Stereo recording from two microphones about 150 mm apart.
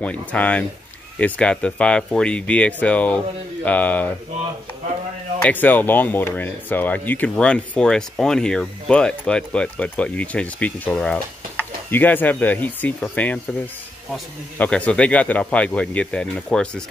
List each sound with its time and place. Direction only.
0.3 s speech: 10° left (ahead or behind)
5.4 s speech: 10° left (ahead or behind)
14.6 s speech: 10° left (ahead or behind)